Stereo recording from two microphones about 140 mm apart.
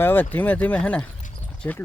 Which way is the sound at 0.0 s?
15° left (ahead or behind).